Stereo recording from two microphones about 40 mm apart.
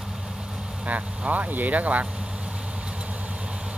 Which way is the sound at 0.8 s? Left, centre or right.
Right.